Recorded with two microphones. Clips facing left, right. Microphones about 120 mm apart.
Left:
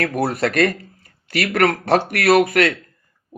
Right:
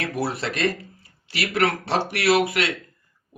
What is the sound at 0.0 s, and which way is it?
Speech, 50° left (ahead or behind).